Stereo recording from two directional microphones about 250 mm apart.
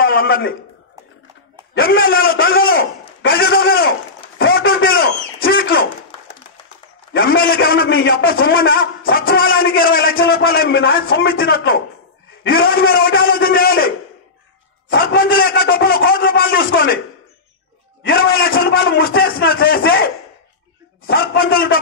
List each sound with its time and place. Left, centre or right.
0.0 s a man's voice: left
2.0 s a man's voice: left
4.4 s a sound: left
7.2 s a man's voice: left
18.0 s a man's voice: left
21.1 s a man's voice: left